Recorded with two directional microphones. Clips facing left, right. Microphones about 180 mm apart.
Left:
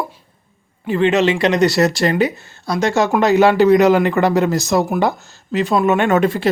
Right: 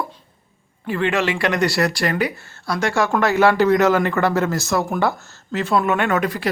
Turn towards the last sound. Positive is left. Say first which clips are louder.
# left 5 dB
turn(degrees=25)  # may be behind; listen again after turning